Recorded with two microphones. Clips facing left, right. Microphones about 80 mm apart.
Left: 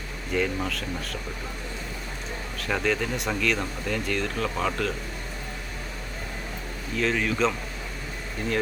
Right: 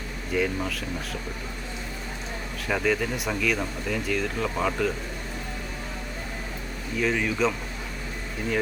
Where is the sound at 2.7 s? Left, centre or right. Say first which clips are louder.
Right 1 dB; centre.